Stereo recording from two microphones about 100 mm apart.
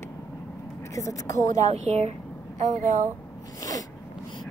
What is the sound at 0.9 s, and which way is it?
Speech, 35° left (ahead or behind).